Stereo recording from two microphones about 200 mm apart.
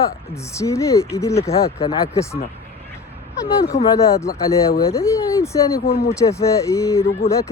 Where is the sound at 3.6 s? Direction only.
15° left (ahead or behind).